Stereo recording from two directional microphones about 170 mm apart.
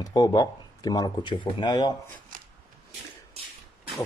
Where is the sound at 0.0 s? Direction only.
25° left (ahead or behind).